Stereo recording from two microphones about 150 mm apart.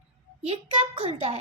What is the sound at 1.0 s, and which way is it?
Speech, 45° right (ahead or behind).